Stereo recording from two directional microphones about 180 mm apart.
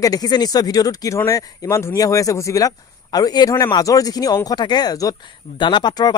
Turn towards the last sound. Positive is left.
turn(degrees=25)  # may be behind; listen again after turning